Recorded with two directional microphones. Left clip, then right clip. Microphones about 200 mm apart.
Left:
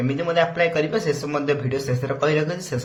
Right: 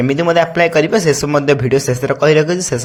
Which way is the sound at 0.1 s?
45° right (ahead or behind).